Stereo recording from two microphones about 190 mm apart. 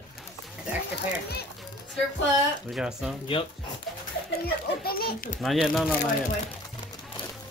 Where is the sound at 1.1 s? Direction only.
55° left (ahead or behind).